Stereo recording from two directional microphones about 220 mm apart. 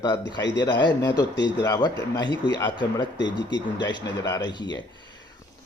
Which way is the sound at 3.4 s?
55° left (ahead or behind).